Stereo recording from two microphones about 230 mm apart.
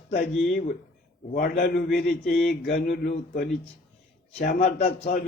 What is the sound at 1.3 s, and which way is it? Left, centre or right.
A man's voice, left.